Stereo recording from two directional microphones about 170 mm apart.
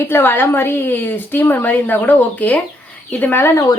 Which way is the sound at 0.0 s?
15° left (ahead or behind).